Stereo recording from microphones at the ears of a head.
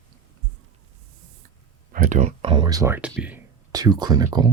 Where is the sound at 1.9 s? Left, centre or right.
Right.